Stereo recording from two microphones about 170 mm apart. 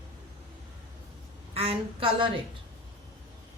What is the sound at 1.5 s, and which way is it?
Speech, 35° right (ahead or behind).